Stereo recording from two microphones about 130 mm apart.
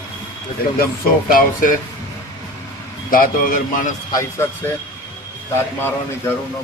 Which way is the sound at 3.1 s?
90° left.